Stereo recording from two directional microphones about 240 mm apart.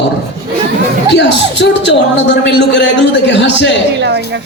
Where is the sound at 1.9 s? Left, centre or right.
Left.